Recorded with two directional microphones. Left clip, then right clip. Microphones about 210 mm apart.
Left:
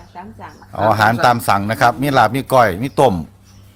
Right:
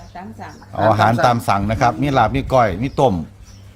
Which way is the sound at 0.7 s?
15° left (ahead or behind).